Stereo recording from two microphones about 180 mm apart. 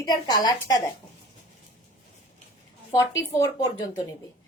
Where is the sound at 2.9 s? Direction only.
15° left (ahead or behind).